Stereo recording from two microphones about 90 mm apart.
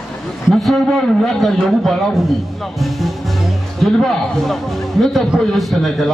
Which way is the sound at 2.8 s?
Centre (ahead or behind).